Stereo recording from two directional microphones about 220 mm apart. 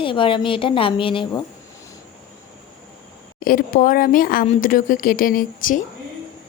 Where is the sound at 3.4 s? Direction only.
40° left (ahead or behind).